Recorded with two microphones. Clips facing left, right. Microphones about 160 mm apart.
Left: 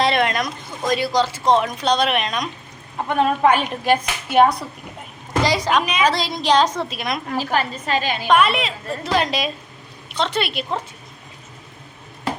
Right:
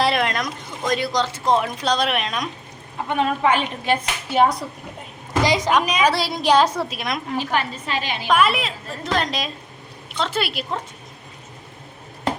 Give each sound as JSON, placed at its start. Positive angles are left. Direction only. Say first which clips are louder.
{"t": 0.0, "sound": "speech", "louder": "left 2 dB", "side_deg": 0}
{"t": 3.2, "sound": "speech", "louder": "left 3 dB", "side_deg": 45}
{"t": 5.4, "sound": "a woman's voice", "louder": "even", "side_deg": -20}
{"t": 7.3, "sound": "a woman's voice", "louder": "left 2 dB", "side_deg": 40}
{"t": 8.3, "sound": "speech", "louder": "left 2 dB", "side_deg": 0}